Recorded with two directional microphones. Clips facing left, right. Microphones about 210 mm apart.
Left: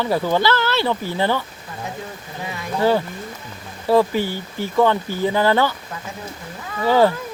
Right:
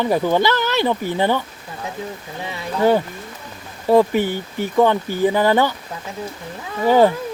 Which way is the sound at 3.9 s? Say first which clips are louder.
Right 2 dB; 15° right (ahead or behind).